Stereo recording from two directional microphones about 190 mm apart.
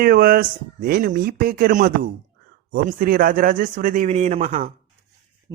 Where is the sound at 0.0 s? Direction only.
50° right (ahead or behind).